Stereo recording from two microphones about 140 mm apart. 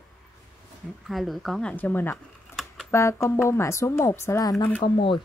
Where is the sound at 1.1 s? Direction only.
Centre (ahead or behind); by 4.6 s 25° left (ahead or behind).